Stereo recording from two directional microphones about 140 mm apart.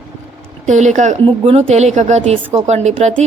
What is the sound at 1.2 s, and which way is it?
A woman's voice, 45° right (ahead or behind).